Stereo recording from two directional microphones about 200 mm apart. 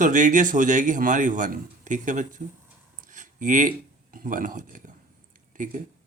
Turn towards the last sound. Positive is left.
turn(degrees=-40)  # may be behind; listen again after turning